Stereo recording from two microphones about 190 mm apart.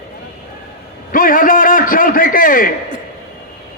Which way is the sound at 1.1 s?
45° left (ahead or behind).